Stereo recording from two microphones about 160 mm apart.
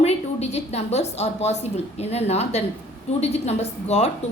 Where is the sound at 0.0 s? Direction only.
40° left (ahead or behind).